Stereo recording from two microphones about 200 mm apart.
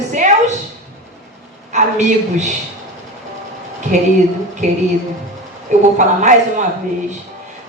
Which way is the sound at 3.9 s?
35° right (ahead or behind).